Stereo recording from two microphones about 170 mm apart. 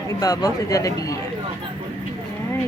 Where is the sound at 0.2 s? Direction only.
20° left (ahead or behind).